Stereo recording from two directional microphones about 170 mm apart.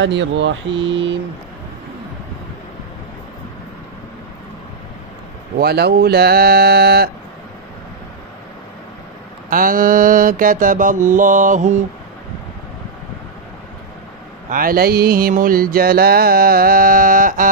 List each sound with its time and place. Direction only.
0.0 s speech: 90° right
5.6 s speech: 70° right (ahead or behind)
9.5 s mantra: 55° right (ahead or behind)
14.5 s music: 55° right (ahead or behind)